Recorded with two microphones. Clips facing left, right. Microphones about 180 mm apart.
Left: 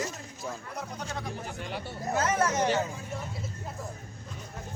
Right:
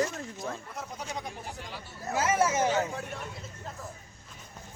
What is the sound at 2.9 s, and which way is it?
Speech, 70° right (ahead or behind).